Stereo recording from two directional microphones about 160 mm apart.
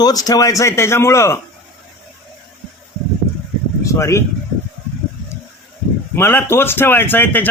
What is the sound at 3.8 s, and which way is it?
Speech, 20° left (ahead or behind).